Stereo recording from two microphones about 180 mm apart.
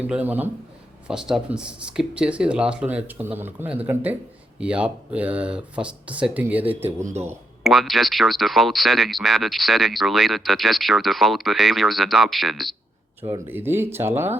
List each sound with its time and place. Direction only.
0.1 s speech: 10° right (ahead or behind)
7.0 s speech: 40° right (ahead or behind)
7.6 s speech: centre (ahead or behind)
13.5 s speech: 10° right (ahead or behind)